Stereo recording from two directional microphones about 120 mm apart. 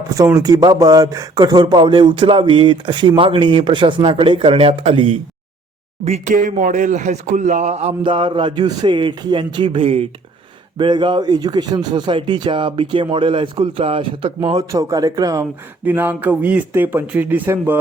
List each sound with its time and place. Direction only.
0.1 s speech: 30° right (ahead or behind); by 5.1 s 50° right (ahead or behind)
6.1 s speech: 80° right
8.0 s speech: 45° right (ahead or behind)
10.8 s speech: 40° right (ahead or behind)
14.7 s speech: 30° right (ahead or behind)
15.8 s speech: 15° right (ahead or behind)